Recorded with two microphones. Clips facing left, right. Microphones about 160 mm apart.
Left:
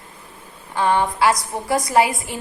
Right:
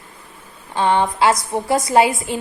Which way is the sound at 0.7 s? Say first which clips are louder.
Right 2 dB; 20° right (ahead or behind).